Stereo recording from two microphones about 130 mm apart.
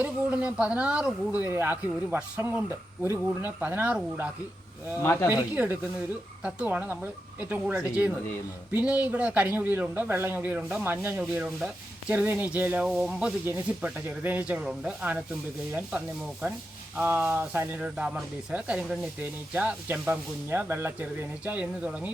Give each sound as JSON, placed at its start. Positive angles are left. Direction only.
{"t": 0.0, "sound": "speech", "side_deg": -10}
{"t": 4.9, "sound": "speech", "side_deg": 20}
{"t": 5.5, "sound": "speech", "side_deg": -15}